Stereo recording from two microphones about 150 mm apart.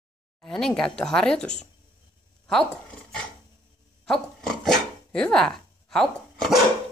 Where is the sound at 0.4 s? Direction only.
5° left (ahead or behind).